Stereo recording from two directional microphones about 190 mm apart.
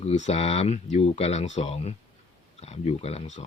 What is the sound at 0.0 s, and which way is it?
Speech, 35° left (ahead or behind).